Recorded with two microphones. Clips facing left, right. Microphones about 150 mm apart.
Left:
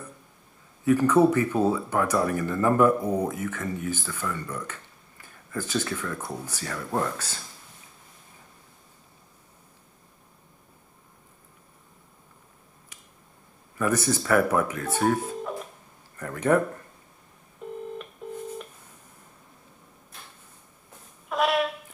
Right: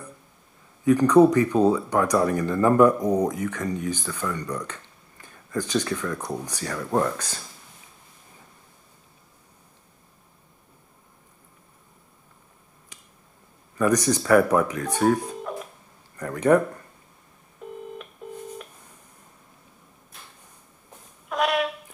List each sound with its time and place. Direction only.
0.8 s speech: 15° right (ahead or behind)
5.2 s a sound: 15° right (ahead or behind)
6.2 s speech: 15° right (ahead or behind)
13.7 s speech: 15° right (ahead or behind)
15.4 s music: centre (ahead or behind)
16.2 s speech: 15° right (ahead or behind)
18.2 s telephone dialing: centre (ahead or behind)
21.3 s a sound: centre (ahead or behind)